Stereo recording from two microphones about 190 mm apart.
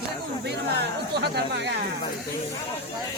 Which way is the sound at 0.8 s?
60° right (ahead or behind).